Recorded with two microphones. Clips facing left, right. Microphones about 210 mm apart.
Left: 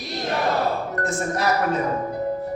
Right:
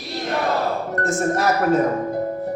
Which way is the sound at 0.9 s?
45° right (ahead or behind).